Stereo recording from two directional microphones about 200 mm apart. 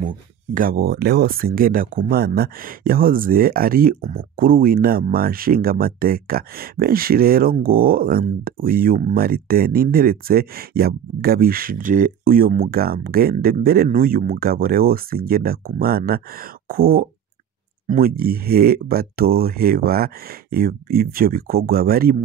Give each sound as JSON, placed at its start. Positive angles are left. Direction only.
{"t": 0.6, "sound": "speech", "side_deg": -45}